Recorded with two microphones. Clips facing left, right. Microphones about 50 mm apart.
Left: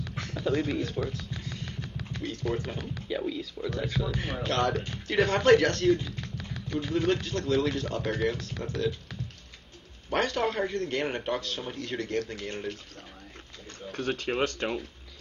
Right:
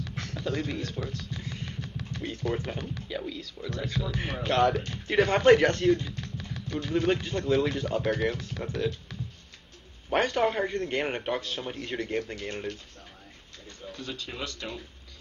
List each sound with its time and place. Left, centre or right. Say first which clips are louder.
0.1 s a sound: left 1 dB; centre
0.4 s speech: left 4 dB; centre
1.5 s a sound: even; centre
2.5 s speech: even; centre
4.2 s a man's voice: right 5 dB; centre
10.1 s a man's voice: right 2 dB; centre
12.4 s speech: even; centre
13.9 s speech: left 9 dB; left